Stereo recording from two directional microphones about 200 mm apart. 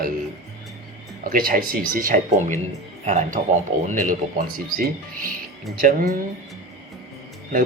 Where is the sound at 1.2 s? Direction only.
45° right (ahead or behind).